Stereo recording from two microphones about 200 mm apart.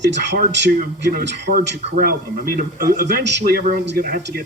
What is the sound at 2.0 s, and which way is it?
Speech, 45° right (ahead or behind).